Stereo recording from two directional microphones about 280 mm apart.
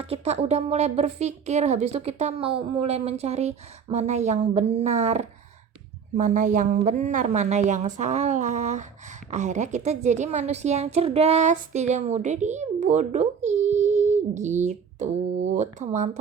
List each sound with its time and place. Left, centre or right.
0.0 s a woman's voice: right